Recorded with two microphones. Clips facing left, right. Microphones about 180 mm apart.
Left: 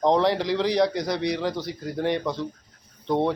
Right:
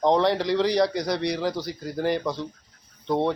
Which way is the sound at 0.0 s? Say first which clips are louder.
Even; centre (ahead or behind).